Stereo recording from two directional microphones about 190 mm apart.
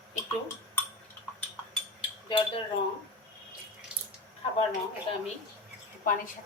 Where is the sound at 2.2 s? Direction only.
25° left (ahead or behind).